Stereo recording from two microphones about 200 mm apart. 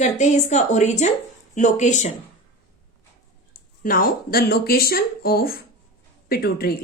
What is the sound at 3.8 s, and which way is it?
Speech, 45° left (ahead or behind).